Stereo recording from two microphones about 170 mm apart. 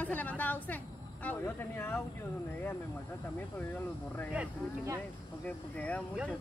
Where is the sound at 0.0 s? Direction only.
10° left (ahead or behind).